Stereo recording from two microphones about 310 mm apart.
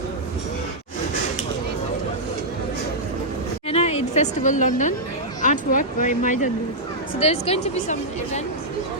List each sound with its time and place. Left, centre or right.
3.7 s a woman's voice: centre